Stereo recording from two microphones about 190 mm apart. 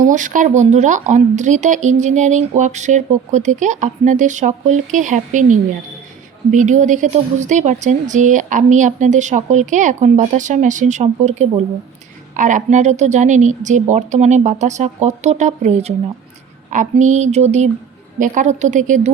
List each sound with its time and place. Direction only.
0.0 s speech: 40° right (ahead or behind)
6.5 s speech: 40° right (ahead or behind)